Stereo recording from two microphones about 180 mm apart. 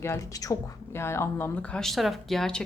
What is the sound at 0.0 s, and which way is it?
Speech, 15° left (ahead or behind).